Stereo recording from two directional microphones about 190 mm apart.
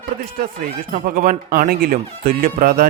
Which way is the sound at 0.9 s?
45° right (ahead or behind).